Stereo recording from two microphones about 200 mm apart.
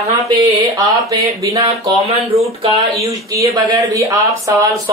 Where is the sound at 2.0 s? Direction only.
30° right (ahead or behind).